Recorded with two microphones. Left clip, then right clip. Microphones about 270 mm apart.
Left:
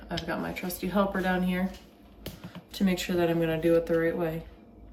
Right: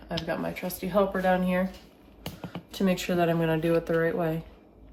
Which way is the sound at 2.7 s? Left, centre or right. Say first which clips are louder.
Right 2 dB; centre.